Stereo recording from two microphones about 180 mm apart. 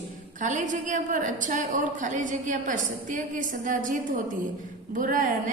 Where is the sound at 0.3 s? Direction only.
45° right (ahead or behind).